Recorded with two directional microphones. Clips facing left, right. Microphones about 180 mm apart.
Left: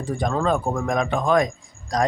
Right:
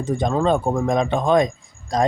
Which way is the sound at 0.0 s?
20° right (ahead or behind).